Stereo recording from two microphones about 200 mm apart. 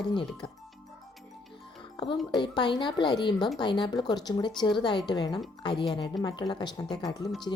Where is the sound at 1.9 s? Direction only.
25° left (ahead or behind).